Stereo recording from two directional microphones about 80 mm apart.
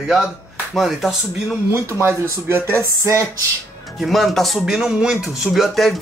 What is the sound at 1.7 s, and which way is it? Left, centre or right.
Speech, right.